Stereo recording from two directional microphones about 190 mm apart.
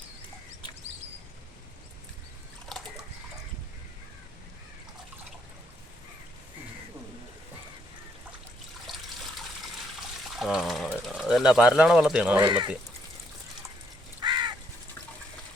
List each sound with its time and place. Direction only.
2.7 s water: centre (ahead or behind)
10.3 s speech: centre (ahead or behind)
12.4 s speech: 20° right (ahead or behind)
14.2 s crow: 25° right (ahead or behind)